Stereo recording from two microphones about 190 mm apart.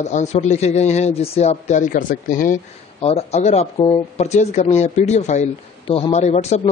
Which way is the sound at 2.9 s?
30° left (ahead or behind).